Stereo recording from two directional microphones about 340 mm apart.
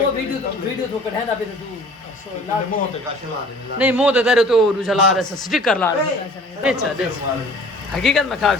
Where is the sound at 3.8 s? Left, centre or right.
Centre.